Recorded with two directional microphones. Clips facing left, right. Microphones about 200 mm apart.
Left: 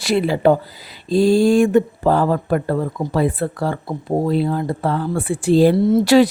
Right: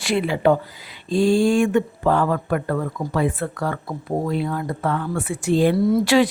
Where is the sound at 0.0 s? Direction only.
35° left (ahead or behind).